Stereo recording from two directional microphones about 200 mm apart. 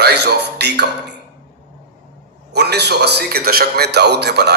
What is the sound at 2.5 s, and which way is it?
A man's voice, 55° right (ahead or behind).